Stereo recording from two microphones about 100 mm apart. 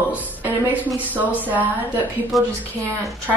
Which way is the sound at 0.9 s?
15° right (ahead or behind).